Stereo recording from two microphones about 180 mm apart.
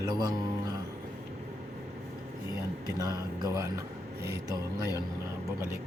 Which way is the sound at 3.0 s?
20° right (ahead or behind).